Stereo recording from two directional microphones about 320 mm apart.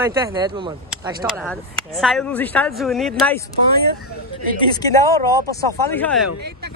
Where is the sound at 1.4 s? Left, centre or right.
Centre.